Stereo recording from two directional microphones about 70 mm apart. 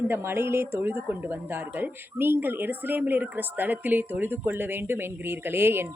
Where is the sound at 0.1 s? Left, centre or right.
Right.